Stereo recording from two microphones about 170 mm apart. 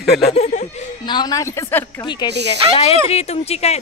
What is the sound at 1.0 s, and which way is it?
Speech, 25° left (ahead or behind).